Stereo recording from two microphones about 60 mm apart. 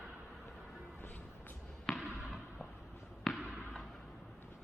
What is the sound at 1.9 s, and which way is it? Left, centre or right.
Basketball bounce, centre.